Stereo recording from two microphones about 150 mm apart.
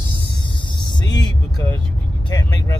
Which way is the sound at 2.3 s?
25° left (ahead or behind).